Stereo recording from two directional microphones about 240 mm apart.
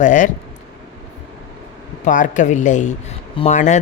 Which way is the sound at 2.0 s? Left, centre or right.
Left.